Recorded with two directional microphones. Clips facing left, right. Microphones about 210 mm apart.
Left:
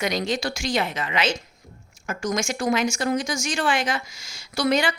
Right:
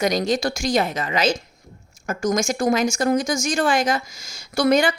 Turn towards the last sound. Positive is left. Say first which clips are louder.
# right 4 dB
turn(degrees=-45)  # may be behind; listen again after turning